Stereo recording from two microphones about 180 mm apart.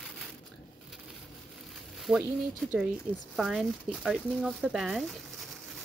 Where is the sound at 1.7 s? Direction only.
Centre (ahead or behind).